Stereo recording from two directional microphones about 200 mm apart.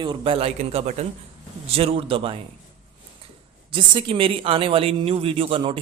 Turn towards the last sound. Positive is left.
turn(degrees=-25)  # may be behind; listen again after turning